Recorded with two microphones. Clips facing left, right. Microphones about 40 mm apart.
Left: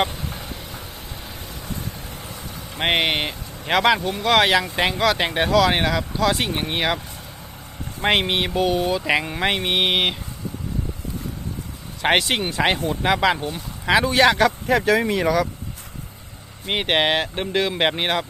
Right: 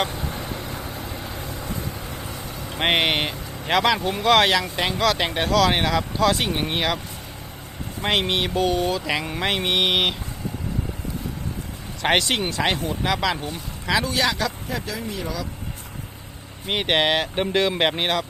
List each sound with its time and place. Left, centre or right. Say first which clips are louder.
2.7 s speech: even; centre
8.0 s speech: left 2 dB; left
12.0 s speech: left 1 dB; centre
12.5 s speech: left 3 dB; centre
13.3 s speech: left 3 dB; centre
13.8 s speech: left 6 dB; left
14.7 s speech: left 11 dB; left
16.6 s speech: left 1 dB; centre